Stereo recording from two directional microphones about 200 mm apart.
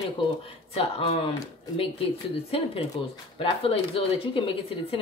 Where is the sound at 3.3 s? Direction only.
25° left (ahead or behind).